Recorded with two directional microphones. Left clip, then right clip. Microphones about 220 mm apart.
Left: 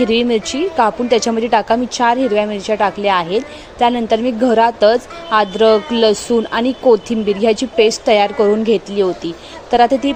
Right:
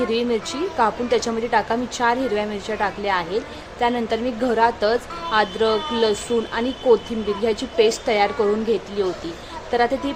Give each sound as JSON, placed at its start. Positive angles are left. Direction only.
{"t": 0.0, "sound": "a woman's voice", "side_deg": 25}